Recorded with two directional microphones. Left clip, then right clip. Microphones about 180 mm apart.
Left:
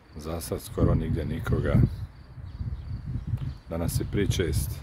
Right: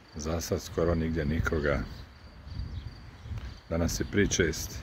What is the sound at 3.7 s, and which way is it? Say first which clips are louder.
Speech: right 1 dB; 10° left (ahead or behind).